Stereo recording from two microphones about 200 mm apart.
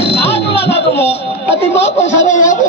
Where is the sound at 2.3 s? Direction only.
40° left (ahead or behind).